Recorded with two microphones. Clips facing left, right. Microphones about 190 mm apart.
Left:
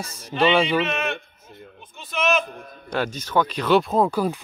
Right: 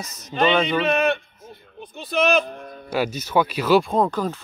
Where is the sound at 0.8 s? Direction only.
35° right (ahead or behind).